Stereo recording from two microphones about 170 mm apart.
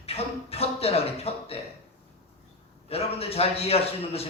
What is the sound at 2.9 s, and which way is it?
A man's voice, 35° left (ahead or behind).